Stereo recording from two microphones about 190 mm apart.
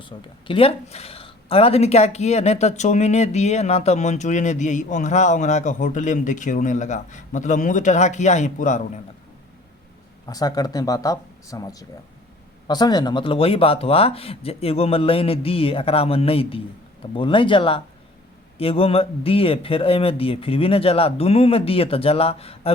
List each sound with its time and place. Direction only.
0.0 s speech: 25° left (ahead or behind)
10.2 s speech: 20° left (ahead or behind)